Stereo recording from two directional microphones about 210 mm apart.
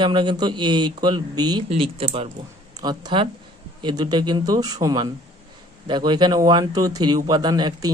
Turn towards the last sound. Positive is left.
turn(degrees=-20)  # may be behind; listen again after turning